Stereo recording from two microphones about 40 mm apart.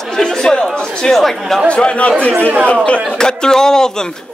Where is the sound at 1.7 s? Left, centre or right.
Left.